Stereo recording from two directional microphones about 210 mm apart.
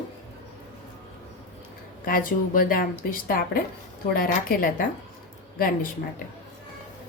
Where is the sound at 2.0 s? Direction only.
45° left (ahead or behind).